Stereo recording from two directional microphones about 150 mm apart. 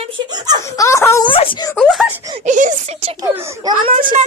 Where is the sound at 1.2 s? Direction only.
35° left (ahead or behind).